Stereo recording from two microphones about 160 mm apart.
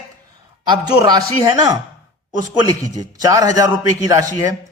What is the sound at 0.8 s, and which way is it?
Speech, 25° right (ahead or behind).